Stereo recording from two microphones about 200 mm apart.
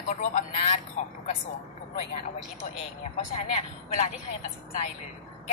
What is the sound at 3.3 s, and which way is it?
Speech, 35° left (ahead or behind).